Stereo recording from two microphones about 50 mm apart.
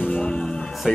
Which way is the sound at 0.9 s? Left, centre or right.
Centre.